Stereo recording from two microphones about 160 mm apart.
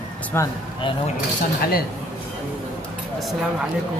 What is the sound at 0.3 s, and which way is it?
Speech, 15° left (ahead or behind).